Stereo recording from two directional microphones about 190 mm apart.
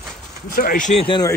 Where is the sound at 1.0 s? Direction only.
20° left (ahead or behind).